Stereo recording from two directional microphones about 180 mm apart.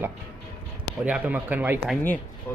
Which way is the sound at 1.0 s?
5° right (ahead or behind).